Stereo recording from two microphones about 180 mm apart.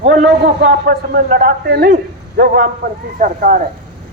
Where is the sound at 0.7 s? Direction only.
55° right (ahead or behind).